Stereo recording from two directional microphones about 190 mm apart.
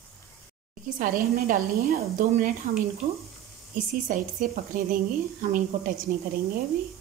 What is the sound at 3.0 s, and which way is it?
Speech, 35° right (ahead or behind).